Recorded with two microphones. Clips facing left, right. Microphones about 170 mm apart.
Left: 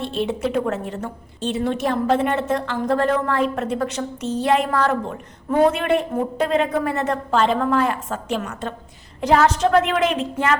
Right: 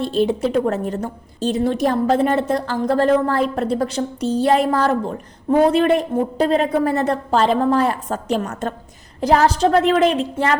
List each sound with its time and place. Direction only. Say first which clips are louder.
0.0 s a woman's voice: right 5 dB; 35° right (ahead or behind)